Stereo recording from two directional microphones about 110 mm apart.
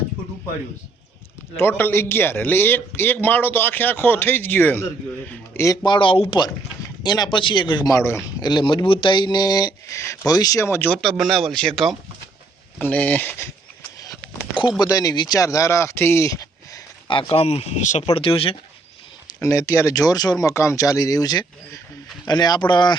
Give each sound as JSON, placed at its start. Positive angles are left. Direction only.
{"t": 1.5, "sound": "a man's voice", "side_deg": 20}
{"t": 5.5, "sound": "a man's voice", "side_deg": 30}
{"t": 5.8, "sound": "speech", "side_deg": 45}
{"t": 7.0, "sound": "speech", "side_deg": 40}
{"t": 7.9, "sound": "a man's voice", "side_deg": 25}
{"t": 8.4, "sound": "speech", "side_deg": 40}
{"t": 10.9, "sound": "speech", "side_deg": 0}
{"t": 12.8, "sound": "speech", "side_deg": 15}
{"t": 14.8, "sound": "speech", "side_deg": 35}
{"t": 17.1, "sound": "speech", "side_deg": 50}
{"t": 18.1, "sound": "speech", "side_deg": 60}
{"t": 19.4, "sound": "speech", "side_deg": 25}